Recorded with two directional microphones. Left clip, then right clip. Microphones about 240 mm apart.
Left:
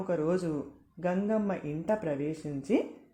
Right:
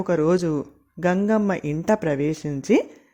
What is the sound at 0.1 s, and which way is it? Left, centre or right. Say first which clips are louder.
A woman's voice: right 10 dB; right.